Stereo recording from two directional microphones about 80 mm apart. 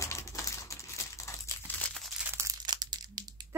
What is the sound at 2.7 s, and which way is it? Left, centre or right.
Crushing, right.